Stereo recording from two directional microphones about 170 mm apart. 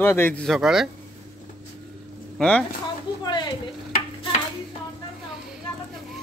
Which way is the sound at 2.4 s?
5° left (ahead or behind).